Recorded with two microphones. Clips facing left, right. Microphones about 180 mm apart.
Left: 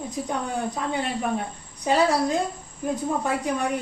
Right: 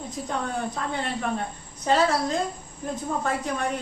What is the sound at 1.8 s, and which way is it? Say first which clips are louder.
A woman's voice: left 1 dB; 15° left (ahead or behind).